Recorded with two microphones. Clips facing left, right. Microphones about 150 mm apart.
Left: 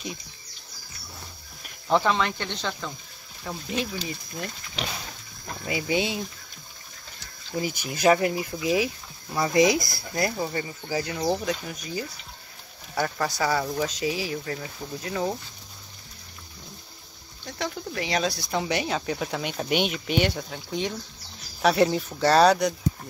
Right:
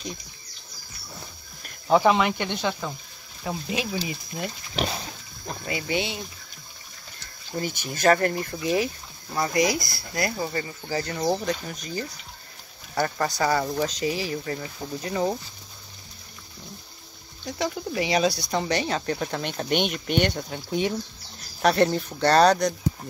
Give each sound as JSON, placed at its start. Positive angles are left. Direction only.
{"t": 1.9, "sound": "speech", "side_deg": -10}
{"t": 5.7, "sound": "speech", "side_deg": 20}
{"t": 7.5, "sound": "speech", "side_deg": 10}
{"t": 9.5, "sound": "speech", "side_deg": 20}
{"t": 10.3, "sound": "speech", "side_deg": 5}
{"t": 17.5, "sound": "speech", "side_deg": -5}